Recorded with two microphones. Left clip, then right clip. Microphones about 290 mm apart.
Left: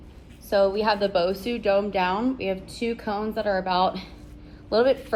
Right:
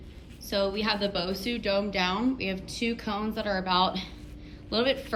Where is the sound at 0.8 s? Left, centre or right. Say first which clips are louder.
Left 7 dB; centre.